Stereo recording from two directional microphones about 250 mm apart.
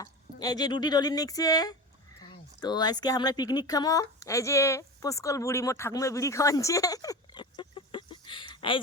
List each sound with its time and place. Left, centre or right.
0.0 s speech: centre